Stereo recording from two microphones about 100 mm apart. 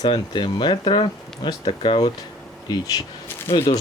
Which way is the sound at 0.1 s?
50° left (ahead or behind).